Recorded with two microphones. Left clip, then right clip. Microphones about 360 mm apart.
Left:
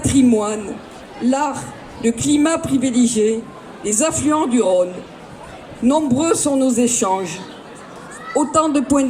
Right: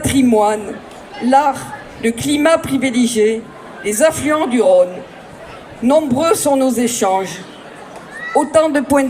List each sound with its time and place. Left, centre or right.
0.0 s a woman's voice: centre
5.9 s a woman's voice: centre
8.5 s a woman's voice: centre